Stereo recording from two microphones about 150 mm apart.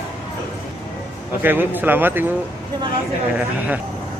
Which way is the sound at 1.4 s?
15° right (ahead or behind).